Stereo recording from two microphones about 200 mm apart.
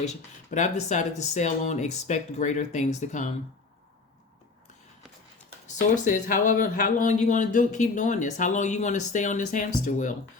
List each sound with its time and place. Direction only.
0.0 s speech: 35° left (ahead or behind)
5.6 s speech: 40° left (ahead or behind)